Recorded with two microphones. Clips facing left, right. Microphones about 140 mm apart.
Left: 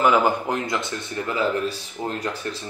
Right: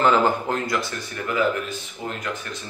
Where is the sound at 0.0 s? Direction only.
10° left (ahead or behind).